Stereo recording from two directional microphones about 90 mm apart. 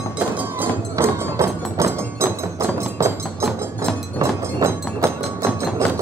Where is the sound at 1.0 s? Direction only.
30° right (ahead or behind).